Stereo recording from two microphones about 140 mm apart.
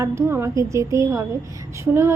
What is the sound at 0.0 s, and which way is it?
A woman's voice, 20° right (ahead or behind).